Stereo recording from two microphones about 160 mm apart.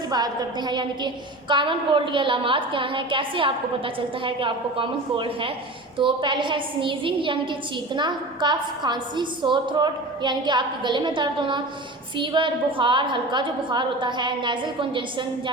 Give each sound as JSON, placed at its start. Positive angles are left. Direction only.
{"t": 0.1, "sound": "a woman's voice", "side_deg": -25}